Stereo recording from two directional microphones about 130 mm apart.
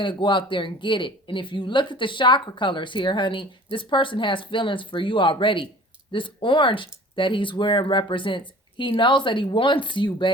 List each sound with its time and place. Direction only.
0.0 s speech: 40° left (ahead or behind)